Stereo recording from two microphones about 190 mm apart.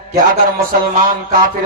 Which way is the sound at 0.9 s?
50° right (ahead or behind).